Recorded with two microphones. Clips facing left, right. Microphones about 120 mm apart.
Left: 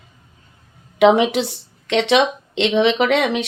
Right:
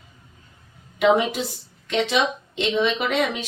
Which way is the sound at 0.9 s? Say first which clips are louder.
Left 6 dB; 90° left.